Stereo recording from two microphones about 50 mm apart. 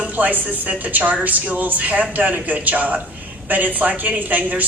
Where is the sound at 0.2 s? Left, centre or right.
Right.